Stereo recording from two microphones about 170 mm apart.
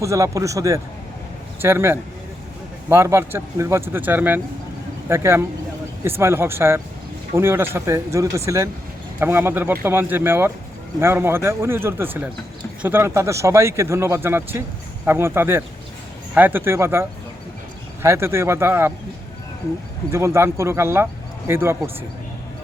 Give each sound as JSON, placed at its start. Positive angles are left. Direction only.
{"t": 0.0, "sound": "speech", "side_deg": -20}
{"t": 20.1, "sound": "speech", "side_deg": -15}